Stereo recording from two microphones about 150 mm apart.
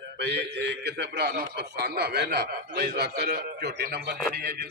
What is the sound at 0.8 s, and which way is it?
A man's voice, 90° right.